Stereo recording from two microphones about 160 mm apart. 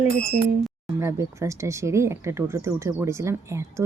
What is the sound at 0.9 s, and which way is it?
Speech, 20° right (ahead or behind).